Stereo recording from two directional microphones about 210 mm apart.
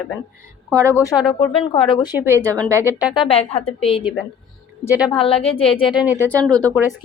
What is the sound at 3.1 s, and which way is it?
Speech, 25° left (ahead or behind).